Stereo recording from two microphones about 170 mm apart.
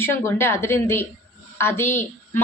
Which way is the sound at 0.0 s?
15° left (ahead or behind).